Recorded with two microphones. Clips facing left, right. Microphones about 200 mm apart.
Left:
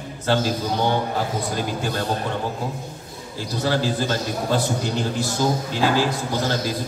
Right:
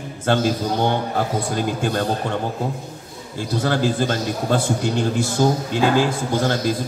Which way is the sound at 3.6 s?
50° right (ahead or behind).